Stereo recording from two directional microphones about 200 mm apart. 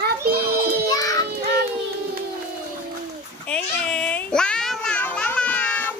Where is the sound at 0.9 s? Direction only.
20° left (ahead or behind).